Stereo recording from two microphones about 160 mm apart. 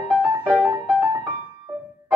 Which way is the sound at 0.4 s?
10° right (ahead or behind).